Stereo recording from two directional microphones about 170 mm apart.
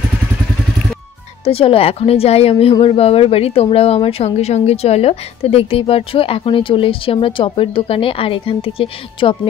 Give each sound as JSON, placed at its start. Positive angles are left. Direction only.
{"t": 1.4, "sound": "speech", "side_deg": 35}